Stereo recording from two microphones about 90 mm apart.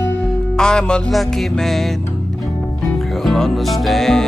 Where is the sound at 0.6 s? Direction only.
10° left (ahead or behind).